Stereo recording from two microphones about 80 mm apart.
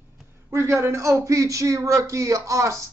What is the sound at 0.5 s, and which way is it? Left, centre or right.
A man's voice, right.